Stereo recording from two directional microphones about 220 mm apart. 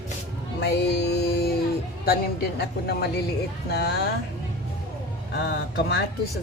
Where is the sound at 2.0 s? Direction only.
45° left (ahead or behind).